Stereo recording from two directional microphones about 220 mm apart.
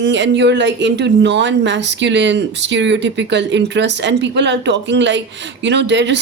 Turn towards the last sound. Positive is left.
turn(degrees=-50)  # may be behind; listen again after turning